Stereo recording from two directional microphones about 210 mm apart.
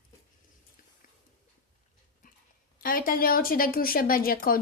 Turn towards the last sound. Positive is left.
turn(degrees=45)  # may be behind; listen again after turning